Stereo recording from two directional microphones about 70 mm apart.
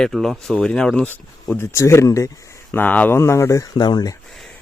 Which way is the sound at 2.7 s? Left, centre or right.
Left.